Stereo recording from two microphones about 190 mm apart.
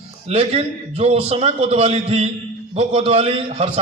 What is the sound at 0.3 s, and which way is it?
A man's voice, 30° right (ahead or behind).